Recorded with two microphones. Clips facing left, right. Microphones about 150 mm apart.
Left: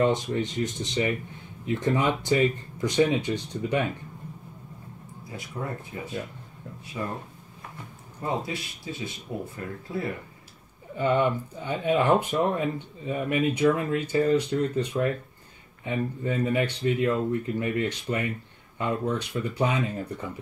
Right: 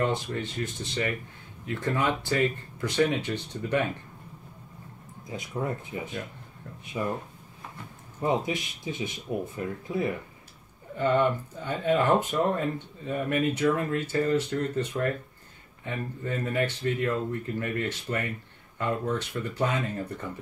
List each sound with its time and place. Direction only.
0.0 s speech: 15° left (ahead or behind)
5.3 s speech: 20° right (ahead or behind)
8.5 s speech: 20° right (ahead or behind)
11.0 s speech: 15° left (ahead or behind)